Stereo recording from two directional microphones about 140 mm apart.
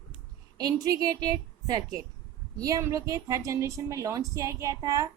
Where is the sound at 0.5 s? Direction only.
25° right (ahead or behind).